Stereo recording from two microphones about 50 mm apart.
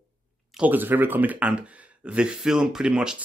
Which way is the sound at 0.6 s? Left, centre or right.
Right.